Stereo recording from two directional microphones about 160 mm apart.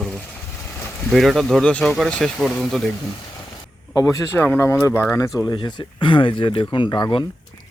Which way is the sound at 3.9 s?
20° left (ahead or behind).